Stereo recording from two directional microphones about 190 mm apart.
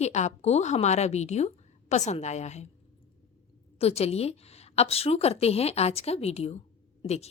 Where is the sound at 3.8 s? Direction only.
35° left (ahead or behind).